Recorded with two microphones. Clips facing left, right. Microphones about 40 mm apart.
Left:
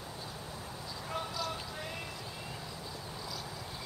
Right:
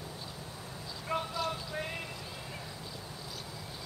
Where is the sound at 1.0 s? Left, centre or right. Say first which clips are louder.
Right 4 dB; right.